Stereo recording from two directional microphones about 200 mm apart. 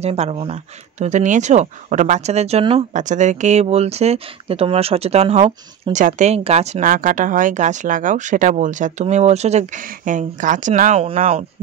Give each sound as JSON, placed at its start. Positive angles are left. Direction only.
{"t": 0.0, "sound": "speech", "side_deg": -30}